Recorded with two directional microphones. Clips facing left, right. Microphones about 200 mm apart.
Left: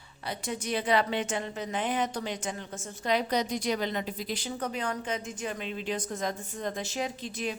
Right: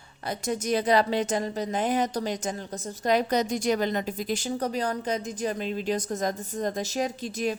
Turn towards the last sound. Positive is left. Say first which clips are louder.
# right 5 dB
turn(degrees=-45)  # may be behind; listen again after turning